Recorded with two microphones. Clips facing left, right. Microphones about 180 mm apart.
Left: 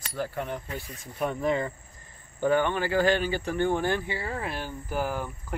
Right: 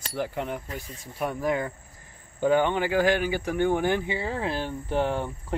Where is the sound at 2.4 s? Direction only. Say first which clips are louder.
Right 2 dB; 15° right (ahead or behind).